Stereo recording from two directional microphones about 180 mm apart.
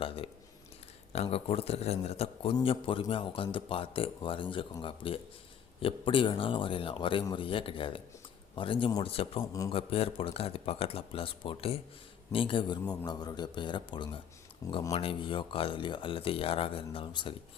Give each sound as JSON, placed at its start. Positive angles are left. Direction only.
{"t": 0.0, "sound": "speech", "side_deg": 30}
{"t": 9.4, "sound": "speech", "side_deg": 20}
{"t": 9.6, "sound": "speech", "side_deg": 30}